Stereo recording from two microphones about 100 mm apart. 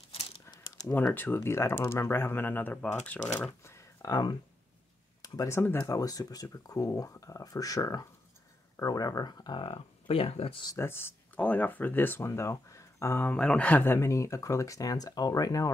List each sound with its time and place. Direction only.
1.1 s speech: 20° left (ahead or behind)
3.6 s a sound: 30° left (ahead or behind)
4.1 s speech: 40° left (ahead or behind)
5.6 s speech: 20° left (ahead or behind)
5.9 s speech: 35° left (ahead or behind); by 10.6 s 75° left (ahead or behind)
10.8 s speech: 25° left (ahead or behind)
13.3 s speech: 10° left (ahead or behind)
13.9 s speech: 30° left (ahead or behind)